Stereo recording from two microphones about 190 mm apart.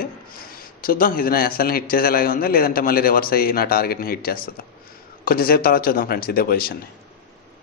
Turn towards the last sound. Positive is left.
turn(degrees=50)  # may be behind; listen again after turning